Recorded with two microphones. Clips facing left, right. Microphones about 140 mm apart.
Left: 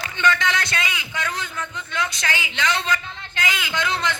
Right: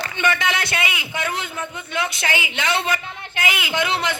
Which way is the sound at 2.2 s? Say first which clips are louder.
Right 1 dB; 20° right (ahead or behind).